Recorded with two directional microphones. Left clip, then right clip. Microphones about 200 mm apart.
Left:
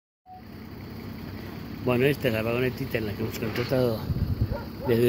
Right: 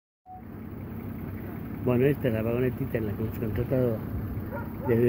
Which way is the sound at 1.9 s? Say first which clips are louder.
Left 1 dB; 10° left (ahead or behind).